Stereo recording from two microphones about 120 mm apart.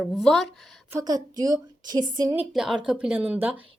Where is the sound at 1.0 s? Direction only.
35° right (ahead or behind).